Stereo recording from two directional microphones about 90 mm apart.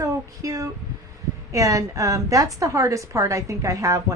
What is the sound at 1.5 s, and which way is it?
A woman's voice, 35° right (ahead or behind).